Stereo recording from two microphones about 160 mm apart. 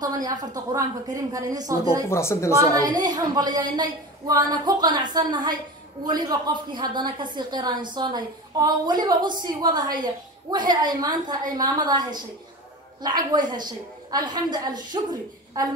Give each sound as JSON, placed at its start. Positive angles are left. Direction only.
{"t": 0.0, "sound": "a woman's voice", "side_deg": -25}
{"t": 2.0, "sound": "speech", "side_deg": 15}
{"t": 2.7, "sound": "a woman's voice", "side_deg": -25}